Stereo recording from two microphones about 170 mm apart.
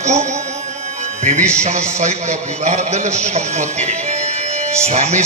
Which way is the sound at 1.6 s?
40° right (ahead or behind).